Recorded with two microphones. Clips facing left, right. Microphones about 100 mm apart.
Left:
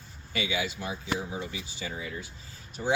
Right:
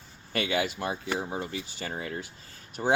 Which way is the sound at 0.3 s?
55° right (ahead or behind).